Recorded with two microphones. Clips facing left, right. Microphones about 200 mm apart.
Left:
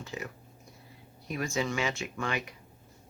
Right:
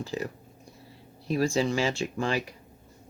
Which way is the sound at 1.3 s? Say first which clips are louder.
Right 7 dB; 30° right (ahead or behind).